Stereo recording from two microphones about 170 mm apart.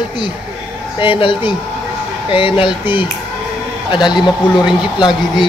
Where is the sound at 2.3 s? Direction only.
30° left (ahead or behind).